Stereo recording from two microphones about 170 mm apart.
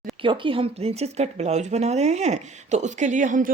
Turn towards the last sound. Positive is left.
turn(degrees=-50)  # may be behind; listen again after turning